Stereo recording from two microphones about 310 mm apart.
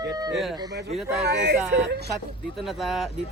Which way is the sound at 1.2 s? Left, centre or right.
Right.